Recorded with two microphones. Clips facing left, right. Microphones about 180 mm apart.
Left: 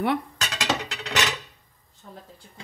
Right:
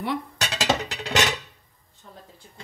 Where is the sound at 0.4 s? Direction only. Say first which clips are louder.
Right 3 dB; 30° right (ahead or behind).